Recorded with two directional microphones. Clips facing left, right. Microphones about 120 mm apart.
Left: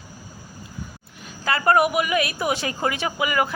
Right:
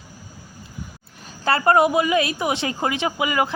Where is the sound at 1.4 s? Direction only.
30° right (ahead or behind).